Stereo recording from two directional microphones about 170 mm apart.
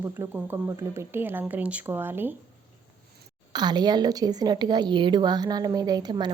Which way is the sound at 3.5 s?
25° right (ahead or behind).